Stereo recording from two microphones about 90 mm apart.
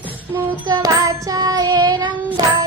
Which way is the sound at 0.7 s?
40° right (ahead or behind).